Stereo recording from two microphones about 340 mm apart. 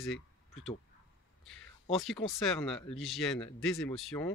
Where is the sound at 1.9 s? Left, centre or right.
Centre.